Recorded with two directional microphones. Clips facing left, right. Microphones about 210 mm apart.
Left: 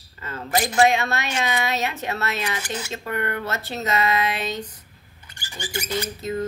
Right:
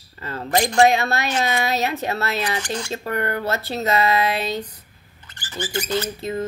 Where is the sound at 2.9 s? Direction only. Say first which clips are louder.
Right 2 dB; 35° right (ahead or behind).